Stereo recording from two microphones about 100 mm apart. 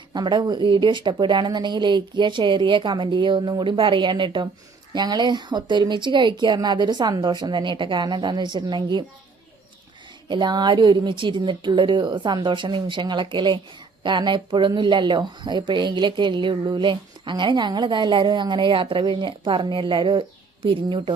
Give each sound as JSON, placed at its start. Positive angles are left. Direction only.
{"t": 0.1, "sound": "speech", "side_deg": -50}
{"t": 10.2, "sound": "speech", "side_deg": -50}